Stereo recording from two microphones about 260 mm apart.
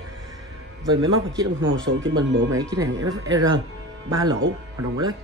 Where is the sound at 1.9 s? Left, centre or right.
Right.